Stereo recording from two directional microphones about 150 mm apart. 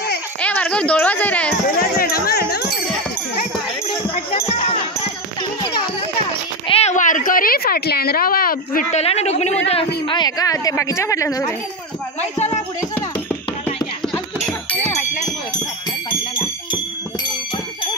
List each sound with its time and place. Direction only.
0.4 s a child's voice: 10° left (ahead or behind)
1.8 s music: 90° left
4.1 s music: 40° left (ahead or behind)
6.7 s a sound: 45° left (ahead or behind); by 8.8 s 75° left (ahead or behind)
8.9 s a man's voice: 45° left (ahead or behind)
10.0 s a woman's voice: 30° left (ahead or behind)
12.2 s music: 45° left (ahead or behind)